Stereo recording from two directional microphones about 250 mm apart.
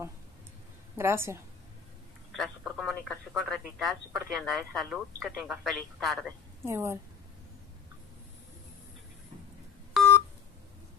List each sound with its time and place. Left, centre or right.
0.9 s a woman's voice: centre
6.6 s a woman's voice: centre
9.9 s telephone dialing: centre